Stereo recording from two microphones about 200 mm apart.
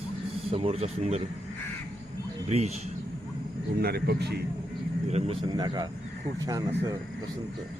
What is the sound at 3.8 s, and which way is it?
Speech, 50° right (ahead or behind).